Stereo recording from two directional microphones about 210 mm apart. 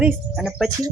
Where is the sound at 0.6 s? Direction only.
15° right (ahead or behind).